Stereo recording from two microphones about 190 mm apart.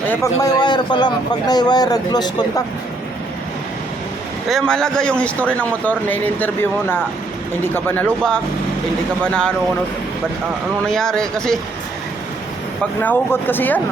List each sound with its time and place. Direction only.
0.1 s speech: 15° left (ahead or behind)
4.4 s a man's voice: centre (ahead or behind)
10.8 s speech: 5° left (ahead or behind)
13.0 s a man's voice: 10° left (ahead or behind)